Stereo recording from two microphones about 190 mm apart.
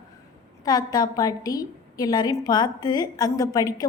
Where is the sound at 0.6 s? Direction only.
20° left (ahead or behind).